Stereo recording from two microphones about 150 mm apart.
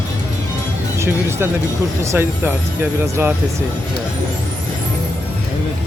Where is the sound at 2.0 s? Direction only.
15° right (ahead or behind).